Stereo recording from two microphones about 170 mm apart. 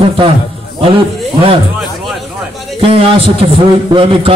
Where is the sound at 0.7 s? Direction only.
30° right (ahead or behind).